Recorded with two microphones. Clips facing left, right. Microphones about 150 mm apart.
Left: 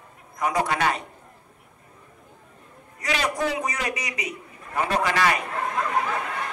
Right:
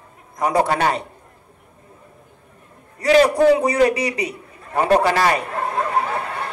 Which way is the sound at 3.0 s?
35° right (ahead or behind).